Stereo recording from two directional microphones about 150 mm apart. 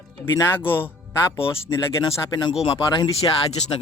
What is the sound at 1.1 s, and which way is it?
Speech, 15° left (ahead or behind).